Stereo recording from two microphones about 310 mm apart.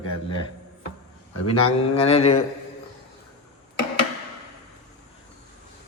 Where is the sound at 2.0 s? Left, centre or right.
Centre.